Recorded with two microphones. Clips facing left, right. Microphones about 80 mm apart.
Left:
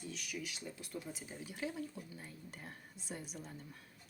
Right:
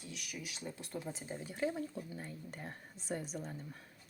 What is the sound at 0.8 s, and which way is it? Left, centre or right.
Speech, right.